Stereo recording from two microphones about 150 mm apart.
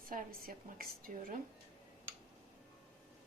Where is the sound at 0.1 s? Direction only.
70° right (ahead or behind).